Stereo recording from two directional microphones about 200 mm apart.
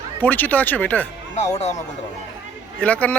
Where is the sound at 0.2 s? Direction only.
10° left (ahead or behind).